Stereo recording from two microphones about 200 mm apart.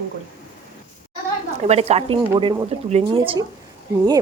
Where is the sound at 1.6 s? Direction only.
30° right (ahead or behind).